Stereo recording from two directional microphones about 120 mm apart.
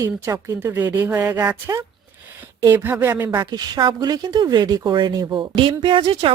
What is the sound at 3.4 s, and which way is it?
Speech, 35° right (ahead or behind).